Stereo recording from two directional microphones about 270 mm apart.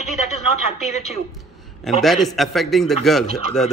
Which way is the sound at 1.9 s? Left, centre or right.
Centre.